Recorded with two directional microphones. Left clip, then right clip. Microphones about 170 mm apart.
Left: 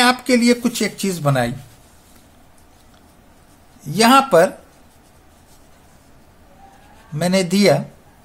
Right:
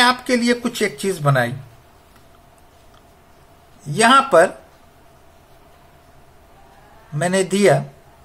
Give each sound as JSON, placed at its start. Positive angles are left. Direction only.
{"t": 0.0, "sound": "speech", "side_deg": 35}
{"t": 3.8, "sound": "speech", "side_deg": 30}
{"t": 7.2, "sound": "speech", "side_deg": 30}